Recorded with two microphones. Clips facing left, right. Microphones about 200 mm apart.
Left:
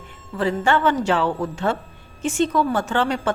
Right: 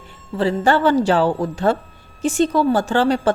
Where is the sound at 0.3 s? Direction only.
35° right (ahead or behind).